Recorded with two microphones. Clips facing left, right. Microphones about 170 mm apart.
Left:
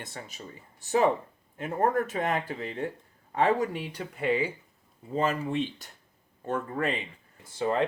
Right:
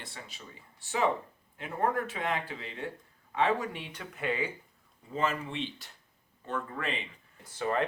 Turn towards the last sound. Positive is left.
turn(degrees=25)  # may be behind; listen again after turning